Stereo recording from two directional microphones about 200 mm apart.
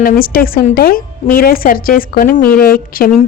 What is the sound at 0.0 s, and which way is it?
A woman's voice, 45° left (ahead or behind).